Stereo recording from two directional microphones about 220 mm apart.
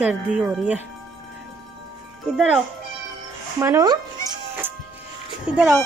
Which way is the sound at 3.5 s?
15° right (ahead or behind).